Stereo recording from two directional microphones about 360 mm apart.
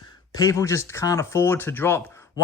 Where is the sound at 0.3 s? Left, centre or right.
Centre.